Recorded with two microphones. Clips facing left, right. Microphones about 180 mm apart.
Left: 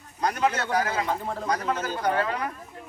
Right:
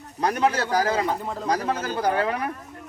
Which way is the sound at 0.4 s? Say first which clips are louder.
Right 3 dB; 35° right (ahead or behind).